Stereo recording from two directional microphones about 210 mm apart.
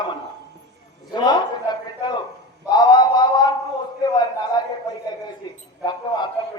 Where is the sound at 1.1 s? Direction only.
20° left (ahead or behind).